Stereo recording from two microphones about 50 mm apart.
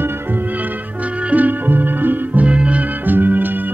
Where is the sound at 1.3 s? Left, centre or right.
Right.